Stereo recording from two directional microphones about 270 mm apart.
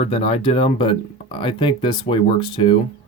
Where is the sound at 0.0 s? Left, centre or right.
Left.